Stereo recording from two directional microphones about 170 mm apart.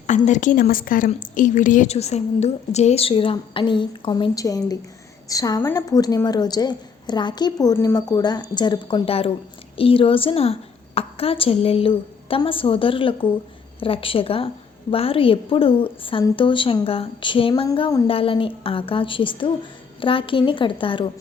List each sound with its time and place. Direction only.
0.1 s a woman's voice: 45° left (ahead or behind); by 21.1 s 30° left (ahead or behind)